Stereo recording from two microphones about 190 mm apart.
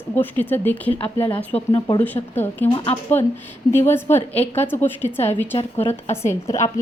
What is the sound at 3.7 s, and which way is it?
A woman's voice, 10° left (ahead or behind).